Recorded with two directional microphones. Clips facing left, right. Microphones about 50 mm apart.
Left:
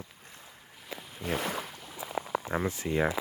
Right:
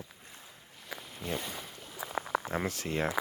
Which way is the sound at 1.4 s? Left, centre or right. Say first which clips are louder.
Left 7 dB; left.